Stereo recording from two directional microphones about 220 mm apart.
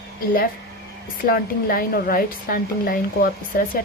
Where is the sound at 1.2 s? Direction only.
40° left (ahead or behind).